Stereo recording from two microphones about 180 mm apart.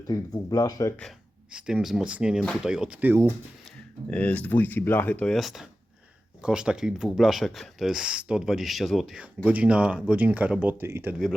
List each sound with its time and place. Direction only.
0.1 s speech: 20° left (ahead or behind)
1.5 s speech: 5° right (ahead or behind)
4.1 s speech: 5° left (ahead or behind); by 11.2 s 10° right (ahead or behind)